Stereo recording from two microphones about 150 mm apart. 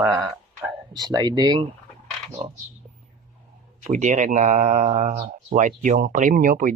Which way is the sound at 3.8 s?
55° right (ahead or behind).